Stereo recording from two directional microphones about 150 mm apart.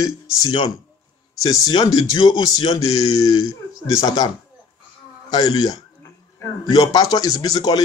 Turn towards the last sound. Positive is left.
turn(degrees=25)  # may be behind; listen again after turning